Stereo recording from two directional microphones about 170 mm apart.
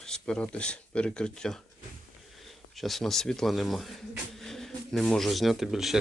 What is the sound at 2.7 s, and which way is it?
Speech, centre (ahead or behind).